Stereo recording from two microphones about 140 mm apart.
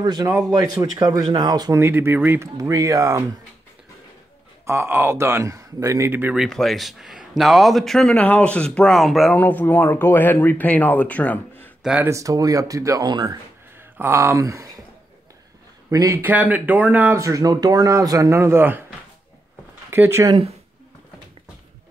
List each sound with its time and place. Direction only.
0.0 s speech: 30° right (ahead or behind)
1.8 s speech: 15° right (ahead or behind)
4.6 s speech: 15° right (ahead or behind)
6.4 s speech: centre (ahead or behind)
9.4 s speech: 10° left (ahead or behind)
11.8 s speech: 5° right (ahead or behind)
12.1 s speech: 25° right (ahead or behind)
13.7 s speech: 15° right (ahead or behind)
15.9 s speech: 20° right (ahead or behind)
19.9 s speech: 20° right (ahead or behind)